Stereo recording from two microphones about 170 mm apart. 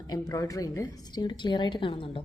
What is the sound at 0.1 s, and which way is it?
A woman's voice, 20° left (ahead or behind).